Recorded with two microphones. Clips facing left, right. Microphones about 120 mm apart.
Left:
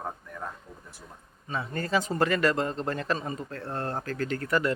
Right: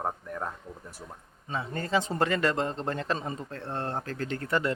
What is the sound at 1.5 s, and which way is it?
Speech, 20° right (ahead or behind).